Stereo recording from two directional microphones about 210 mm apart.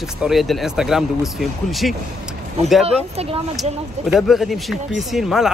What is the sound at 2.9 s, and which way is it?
Speech, 30° right (ahead or behind).